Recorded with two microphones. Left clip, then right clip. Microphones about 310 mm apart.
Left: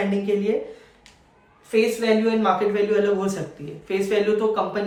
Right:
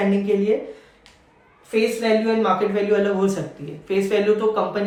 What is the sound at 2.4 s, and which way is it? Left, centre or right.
Speech, centre.